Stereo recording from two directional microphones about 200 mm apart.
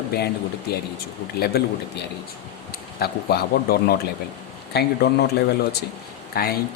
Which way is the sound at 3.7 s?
50° left (ahead or behind).